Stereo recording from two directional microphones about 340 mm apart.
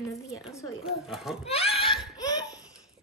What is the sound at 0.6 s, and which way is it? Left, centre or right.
Speech, centre.